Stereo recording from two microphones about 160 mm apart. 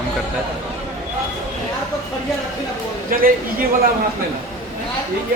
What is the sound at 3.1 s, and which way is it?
Speech, 65° right (ahead or behind).